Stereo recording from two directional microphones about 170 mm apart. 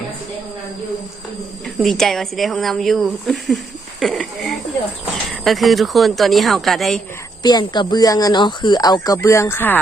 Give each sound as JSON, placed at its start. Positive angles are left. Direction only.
{"t": 1.6, "sound": "speech", "side_deg": 0}
{"t": 4.0, "sound": "a sound", "side_deg": 0}
{"t": 5.3, "sound": "speech", "side_deg": 0}
{"t": 7.4, "sound": "speech", "side_deg": 25}